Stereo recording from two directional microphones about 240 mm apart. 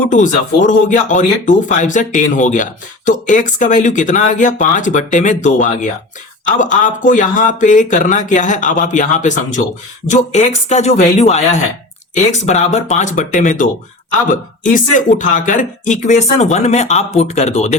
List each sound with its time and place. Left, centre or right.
0.1 s speech: left